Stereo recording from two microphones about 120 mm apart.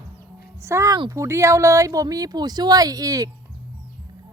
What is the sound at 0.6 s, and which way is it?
Speech, 25° right (ahead or behind).